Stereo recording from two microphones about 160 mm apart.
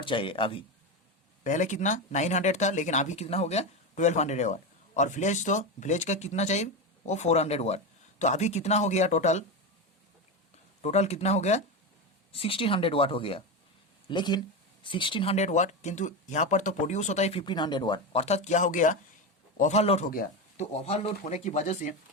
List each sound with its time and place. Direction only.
0.0 s speech: 30° left (ahead or behind)
1.5 s speech: 50° left (ahead or behind)
10.8 s speech: 45° left (ahead or behind)
15.4 s speech: 45° left (ahead or behind)
17.4 s speech: 30° left (ahead or behind)
20.1 s speech: 60° left (ahead or behind)
20.8 s speech: 40° left (ahead or behind)